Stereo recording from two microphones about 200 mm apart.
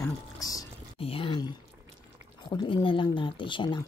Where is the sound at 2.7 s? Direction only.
25° left (ahead or behind).